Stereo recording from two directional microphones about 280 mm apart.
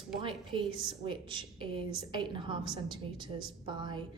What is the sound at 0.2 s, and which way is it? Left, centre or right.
A woman's voice, centre.